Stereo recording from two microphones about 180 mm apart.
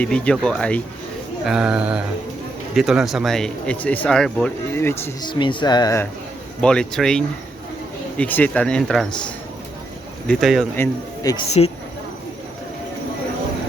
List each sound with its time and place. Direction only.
0.0 s speech: 5° left (ahead or behind)
5.2 s speech: 25° left (ahead or behind)
6.6 s speech: 5° left (ahead or behind)
10.8 s speech: 20° left (ahead or behind)
11.6 s speech: 30° left (ahead or behind)